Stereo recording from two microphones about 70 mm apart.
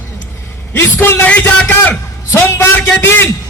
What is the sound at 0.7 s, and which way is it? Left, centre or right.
Speech, left.